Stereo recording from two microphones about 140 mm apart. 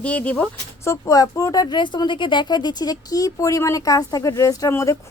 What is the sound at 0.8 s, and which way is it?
Speech, 20° left (ahead or behind).